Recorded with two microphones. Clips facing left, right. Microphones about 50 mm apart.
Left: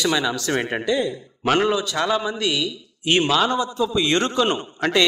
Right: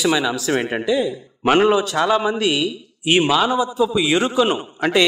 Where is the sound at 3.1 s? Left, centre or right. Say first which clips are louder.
Right 2 dB; centre.